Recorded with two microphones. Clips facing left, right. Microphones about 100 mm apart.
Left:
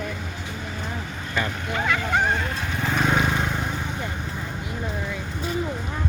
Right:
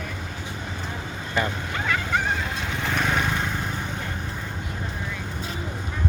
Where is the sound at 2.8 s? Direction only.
5° left (ahead or behind).